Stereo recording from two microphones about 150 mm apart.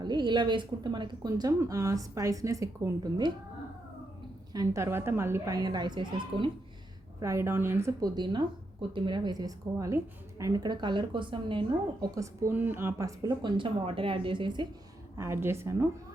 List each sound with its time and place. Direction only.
0.0 s speech: 30° right (ahead or behind)
4.5 s speech: 20° right (ahead or behind)
7.2 s speech: 20° right (ahead or behind)
12.1 s speech: 20° right (ahead or behind)
15.2 s a woman's voice: 15° right (ahead or behind)